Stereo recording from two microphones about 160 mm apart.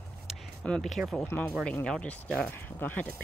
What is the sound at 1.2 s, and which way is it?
Speech, 10° left (ahead or behind).